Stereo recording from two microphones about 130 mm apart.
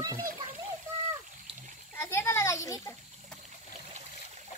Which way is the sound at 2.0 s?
20° left (ahead or behind).